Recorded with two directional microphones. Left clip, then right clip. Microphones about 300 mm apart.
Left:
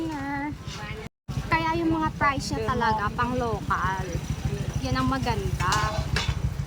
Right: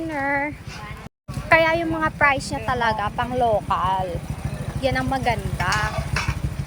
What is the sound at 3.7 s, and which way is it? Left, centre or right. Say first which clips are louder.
Speech: right 5 dB; right.